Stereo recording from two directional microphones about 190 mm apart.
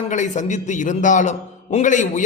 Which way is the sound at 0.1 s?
40° left (ahead or behind).